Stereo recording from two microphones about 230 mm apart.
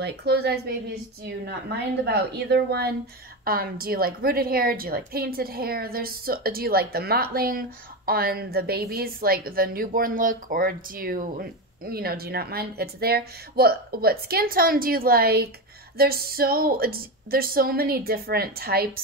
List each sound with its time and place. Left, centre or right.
0.0 s speech: right
2.0 s a woman's voice: right